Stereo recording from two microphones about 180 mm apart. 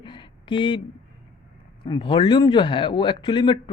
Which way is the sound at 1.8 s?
25° left (ahead or behind).